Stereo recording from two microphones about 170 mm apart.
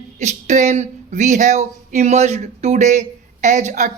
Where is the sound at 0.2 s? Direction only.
40° right (ahead or behind).